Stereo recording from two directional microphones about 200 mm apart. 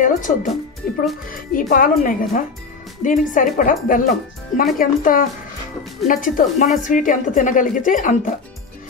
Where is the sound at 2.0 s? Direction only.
45° left (ahead or behind).